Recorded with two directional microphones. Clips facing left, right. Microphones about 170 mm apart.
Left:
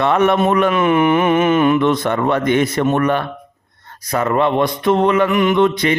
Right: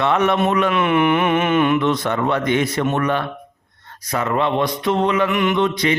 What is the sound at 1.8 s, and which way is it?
Speech, 50° left (ahead or behind).